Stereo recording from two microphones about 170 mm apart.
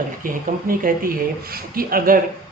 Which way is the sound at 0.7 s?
55° right (ahead or behind).